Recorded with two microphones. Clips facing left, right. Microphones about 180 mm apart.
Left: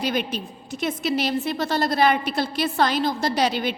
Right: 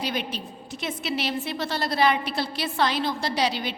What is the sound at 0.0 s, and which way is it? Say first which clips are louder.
A woman's voice: left 4 dB; 50° left (ahead or behind).